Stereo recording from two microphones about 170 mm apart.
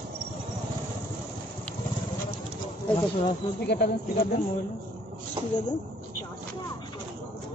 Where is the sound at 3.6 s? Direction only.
70° left (ahead or behind).